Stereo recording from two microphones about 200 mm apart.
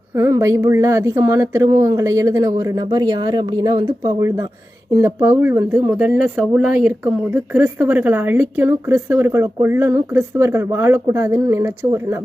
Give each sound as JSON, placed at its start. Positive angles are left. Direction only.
{"t": 0.2, "sound": "speech", "side_deg": -15}